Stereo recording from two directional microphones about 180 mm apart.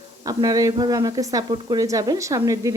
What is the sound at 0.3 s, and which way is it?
Speech, 20° right (ahead or behind).